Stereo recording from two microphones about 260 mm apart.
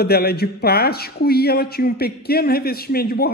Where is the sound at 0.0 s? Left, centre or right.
Left.